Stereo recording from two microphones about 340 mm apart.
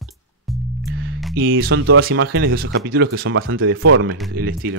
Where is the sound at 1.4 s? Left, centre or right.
Right.